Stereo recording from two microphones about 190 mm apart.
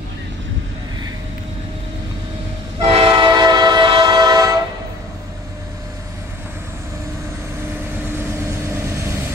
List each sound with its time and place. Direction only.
2.8 s train: 30° right (ahead or behind)
8.2 s vehicle: 15° right (ahead or behind)